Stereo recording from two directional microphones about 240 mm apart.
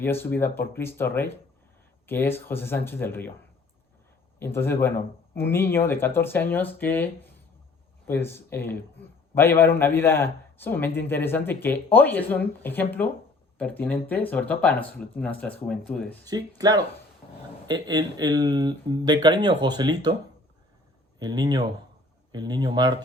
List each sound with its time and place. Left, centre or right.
0.0 s speech: centre
4.4 s speech: centre
16.2 s speech: centre
21.2 s speech: centre